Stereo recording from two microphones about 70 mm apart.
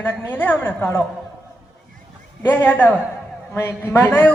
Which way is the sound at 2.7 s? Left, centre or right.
Left.